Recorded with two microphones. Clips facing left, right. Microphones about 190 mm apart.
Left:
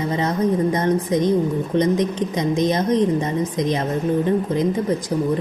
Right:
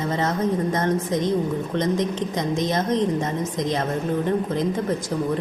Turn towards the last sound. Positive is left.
turn(degrees=15)  # may be behind; listen again after turning